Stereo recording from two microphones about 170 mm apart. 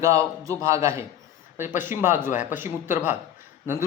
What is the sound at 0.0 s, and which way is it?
A man's voice, 20° right (ahead or behind).